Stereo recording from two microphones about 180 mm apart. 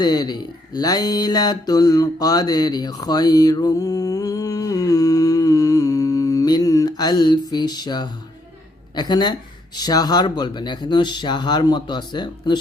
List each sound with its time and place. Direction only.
0.0 s speech: 20° left (ahead or behind)
0.8 s mantra: 20° left (ahead or behind)
9.0 s speech: 25° left (ahead or behind)